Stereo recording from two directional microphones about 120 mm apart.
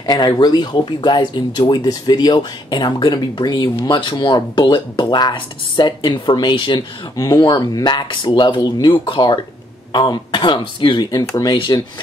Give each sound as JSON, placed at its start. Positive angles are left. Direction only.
{"t": 0.0, "sound": "speech", "side_deg": 30}
{"t": 11.1, "sound": "speech", "side_deg": 30}